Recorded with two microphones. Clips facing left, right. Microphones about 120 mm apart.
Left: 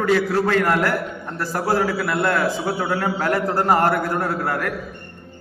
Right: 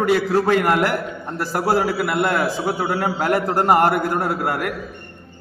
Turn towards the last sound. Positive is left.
turn(degrees=-15)  # may be behind; listen again after turning